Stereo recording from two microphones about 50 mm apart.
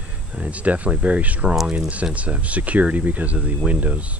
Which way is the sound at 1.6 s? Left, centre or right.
Centre.